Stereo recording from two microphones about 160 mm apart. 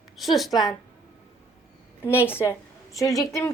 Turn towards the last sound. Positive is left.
turn(degrees=20)  # may be behind; listen again after turning